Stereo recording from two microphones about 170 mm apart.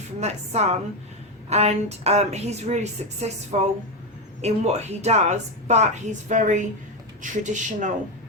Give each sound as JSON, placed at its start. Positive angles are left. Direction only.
{"t": 0.2, "sound": "a woman's voice", "side_deg": -40}